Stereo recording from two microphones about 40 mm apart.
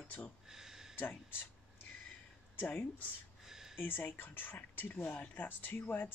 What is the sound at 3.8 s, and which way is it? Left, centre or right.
Speech, left.